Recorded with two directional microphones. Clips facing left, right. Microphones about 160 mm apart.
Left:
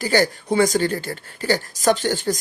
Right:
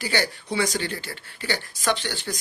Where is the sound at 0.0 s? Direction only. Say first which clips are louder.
Left 7 dB; 45° left (ahead or behind).